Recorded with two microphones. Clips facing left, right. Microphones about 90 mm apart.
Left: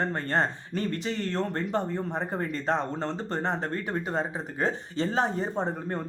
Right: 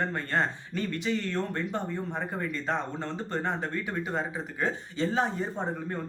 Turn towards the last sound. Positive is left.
turn(degrees=45)  # may be behind; listen again after turning